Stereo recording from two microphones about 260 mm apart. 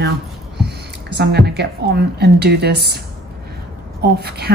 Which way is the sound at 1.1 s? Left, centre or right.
Right.